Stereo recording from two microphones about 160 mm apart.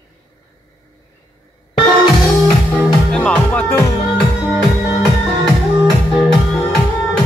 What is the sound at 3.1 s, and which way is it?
Music, 10° left (ahead or behind).